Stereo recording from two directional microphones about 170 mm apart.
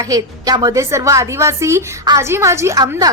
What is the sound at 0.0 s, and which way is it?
A woman's voice, 20° right (ahead or behind).